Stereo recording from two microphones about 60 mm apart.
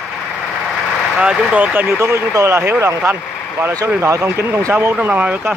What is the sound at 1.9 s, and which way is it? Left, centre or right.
Speech, right.